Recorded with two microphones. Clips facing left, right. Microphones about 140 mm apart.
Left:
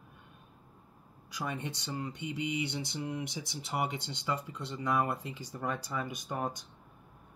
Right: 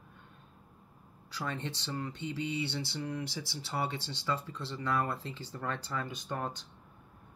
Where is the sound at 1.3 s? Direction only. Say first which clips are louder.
Even; 15° left (ahead or behind).